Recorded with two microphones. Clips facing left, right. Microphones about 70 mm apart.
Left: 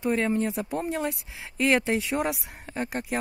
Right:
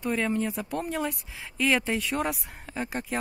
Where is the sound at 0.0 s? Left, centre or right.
Centre.